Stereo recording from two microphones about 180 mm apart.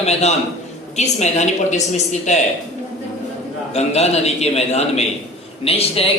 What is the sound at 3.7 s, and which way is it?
A man's voice, 35° left (ahead or behind).